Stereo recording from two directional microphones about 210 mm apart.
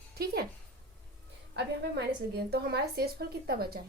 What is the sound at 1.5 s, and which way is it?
A woman's voice, 55° right (ahead or behind).